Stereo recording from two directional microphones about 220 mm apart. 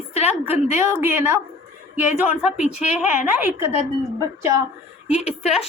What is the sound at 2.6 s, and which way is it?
Speech, 30° left (ahead or behind).